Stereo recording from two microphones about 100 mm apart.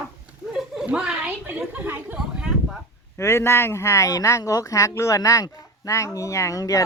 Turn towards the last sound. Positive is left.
turn(degrees=35)  # may be behind; listen again after turning